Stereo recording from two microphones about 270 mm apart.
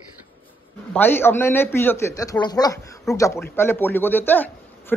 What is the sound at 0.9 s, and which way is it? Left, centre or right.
Speech, centre.